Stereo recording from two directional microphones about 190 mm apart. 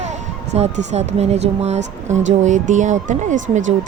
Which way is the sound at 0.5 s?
35° right (ahead or behind).